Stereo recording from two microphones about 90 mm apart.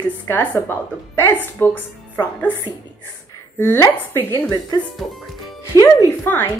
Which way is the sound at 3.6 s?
25° left (ahead or behind).